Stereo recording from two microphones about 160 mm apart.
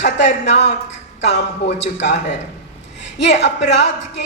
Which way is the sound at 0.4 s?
90° left.